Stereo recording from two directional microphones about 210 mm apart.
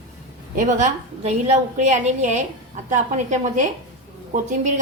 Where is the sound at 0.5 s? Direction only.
35° right (ahead or behind).